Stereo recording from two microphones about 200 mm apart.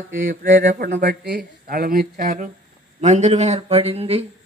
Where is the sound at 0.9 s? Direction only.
55° right (ahead or behind); by 4.2 s 30° right (ahead or behind).